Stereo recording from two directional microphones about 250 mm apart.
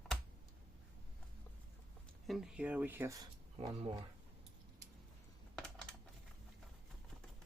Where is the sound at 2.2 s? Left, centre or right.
Centre.